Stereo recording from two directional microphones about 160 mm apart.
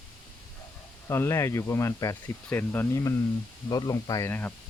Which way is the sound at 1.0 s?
15° left (ahead or behind).